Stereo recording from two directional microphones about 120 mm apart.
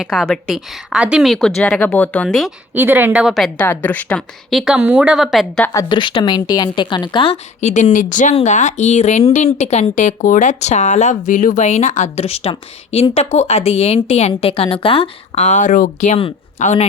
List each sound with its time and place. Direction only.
0.0 s a woman's voice: 5° left (ahead or behind)
2.7 s speech: 15° right (ahead or behind)
3.1 s a woman's voice: 5° right (ahead or behind)
3.7 s a woman's voice: 15° left (ahead or behind)
4.4 s a woman's voice: centre (ahead or behind)
5.7 s speech: 40° left (ahead or behind)
7.6 s speech: 75° left (ahead or behind)
9.9 s speech: 90° left; by 15.4 s 50° left (ahead or behind)
15.4 s speech: 90° left